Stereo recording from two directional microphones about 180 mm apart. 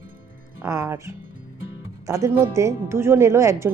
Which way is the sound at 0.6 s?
15° right (ahead or behind).